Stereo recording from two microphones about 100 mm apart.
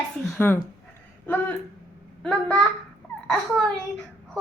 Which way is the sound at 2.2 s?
10° left (ahead or behind).